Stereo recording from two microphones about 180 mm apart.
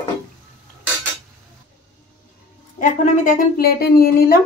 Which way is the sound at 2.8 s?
45° left (ahead or behind).